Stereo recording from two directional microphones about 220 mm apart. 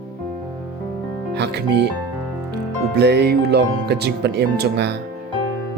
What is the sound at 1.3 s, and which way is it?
Music, 50° right (ahead or behind).